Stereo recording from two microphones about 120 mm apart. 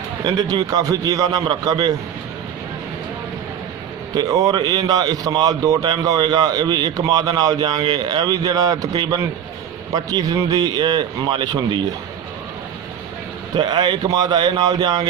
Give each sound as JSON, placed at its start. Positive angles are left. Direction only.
{"t": 0.3, "sound": "a man's voice", "side_deg": -35}
{"t": 4.1, "sound": "a man's voice", "side_deg": -30}
{"t": 13.6, "sound": "a man's voice", "side_deg": -40}